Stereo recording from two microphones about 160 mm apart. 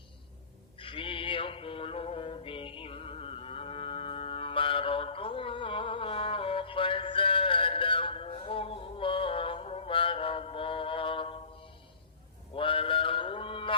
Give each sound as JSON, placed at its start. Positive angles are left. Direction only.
{"t": 0.8, "sound": "music", "side_deg": 35}
{"t": 12.5, "sound": "mantra", "side_deg": 35}